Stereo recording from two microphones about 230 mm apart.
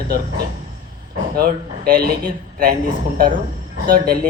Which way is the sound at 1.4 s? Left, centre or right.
Right.